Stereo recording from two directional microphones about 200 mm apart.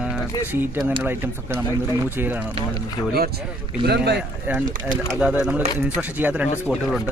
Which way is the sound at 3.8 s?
55° right (ahead or behind).